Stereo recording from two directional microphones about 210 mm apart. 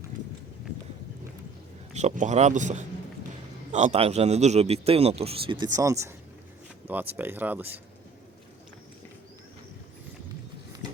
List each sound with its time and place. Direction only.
1.9 s a man's voice: 35° right (ahead or behind); by 7.8 s 10° right (ahead or behind)